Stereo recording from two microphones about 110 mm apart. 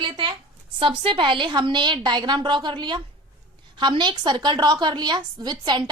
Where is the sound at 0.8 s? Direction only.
50° right (ahead or behind).